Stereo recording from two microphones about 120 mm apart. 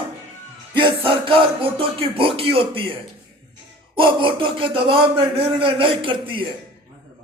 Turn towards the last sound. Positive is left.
turn(degrees=-45)  # may be behind; listen again after turning